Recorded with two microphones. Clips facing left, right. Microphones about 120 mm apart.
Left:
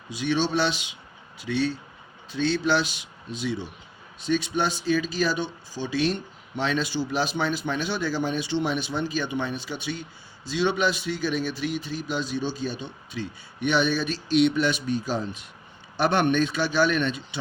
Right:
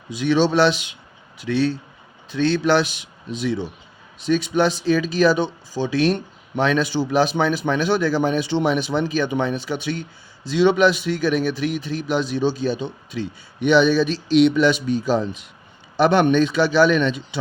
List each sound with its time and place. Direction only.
0.3 s speech: 80° right